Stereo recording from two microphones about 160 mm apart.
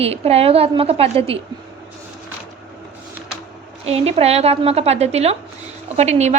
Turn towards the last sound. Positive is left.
turn(degrees=-45)  # may be behind; listen again after turning